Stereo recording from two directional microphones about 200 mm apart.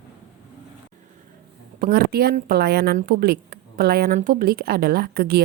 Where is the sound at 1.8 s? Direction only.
50° right (ahead or behind).